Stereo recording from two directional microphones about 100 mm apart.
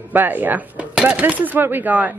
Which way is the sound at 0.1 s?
20° right (ahead or behind).